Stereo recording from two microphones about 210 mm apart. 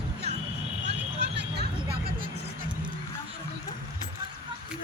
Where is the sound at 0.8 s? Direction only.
55° right (ahead or behind).